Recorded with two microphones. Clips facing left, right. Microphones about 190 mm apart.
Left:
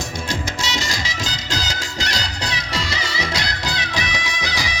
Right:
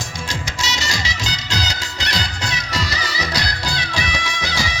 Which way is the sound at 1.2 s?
50° left (ahead or behind).